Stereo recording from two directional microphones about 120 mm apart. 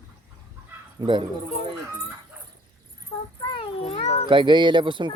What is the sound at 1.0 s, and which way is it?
Speech, 40° right (ahead or behind).